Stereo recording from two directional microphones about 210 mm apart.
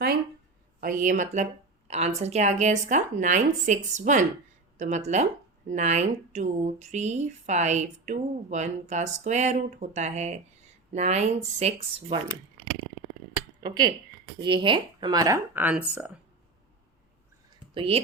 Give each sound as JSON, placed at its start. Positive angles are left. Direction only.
{"t": 0.8, "sound": "speech", "side_deg": -40}
{"t": 13.6, "sound": "speech", "side_deg": -20}
{"t": 17.7, "sound": "speech", "side_deg": -25}